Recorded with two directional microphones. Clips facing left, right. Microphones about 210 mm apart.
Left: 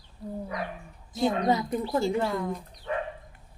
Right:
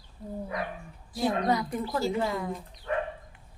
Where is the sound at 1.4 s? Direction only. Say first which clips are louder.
Left 2 dB; 25° left (ahead or behind).